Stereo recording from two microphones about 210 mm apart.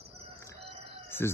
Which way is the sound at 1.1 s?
10° left (ahead or behind).